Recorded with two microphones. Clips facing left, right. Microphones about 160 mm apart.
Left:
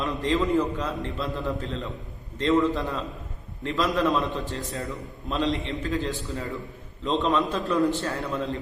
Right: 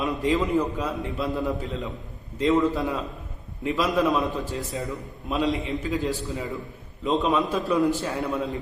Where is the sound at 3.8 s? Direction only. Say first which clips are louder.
Right 1 dB; centre (ahead or behind).